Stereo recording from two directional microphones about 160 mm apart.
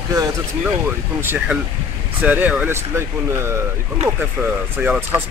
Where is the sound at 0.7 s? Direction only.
15° right (ahead or behind).